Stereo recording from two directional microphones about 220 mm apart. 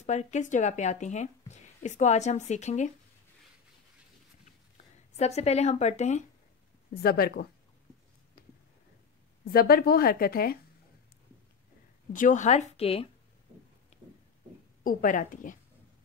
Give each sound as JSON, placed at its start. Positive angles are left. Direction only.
{"t": 0.0, "sound": "speech", "side_deg": 30}
{"t": 5.1, "sound": "speech", "side_deg": 30}
{"t": 6.9, "sound": "a woman's voice", "side_deg": 45}
{"t": 9.4, "sound": "a woman's voice", "side_deg": 40}
{"t": 12.1, "sound": "speech", "side_deg": 35}
{"t": 14.8, "sound": "speech", "side_deg": 40}